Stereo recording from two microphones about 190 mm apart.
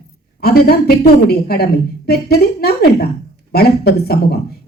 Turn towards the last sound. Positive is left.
turn(degrees=55)  # may be behind; listen again after turning